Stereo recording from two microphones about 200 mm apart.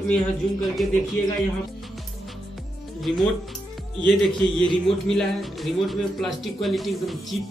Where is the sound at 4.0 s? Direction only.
5° left (ahead or behind).